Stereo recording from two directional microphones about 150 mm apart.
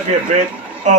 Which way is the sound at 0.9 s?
50° right (ahead or behind).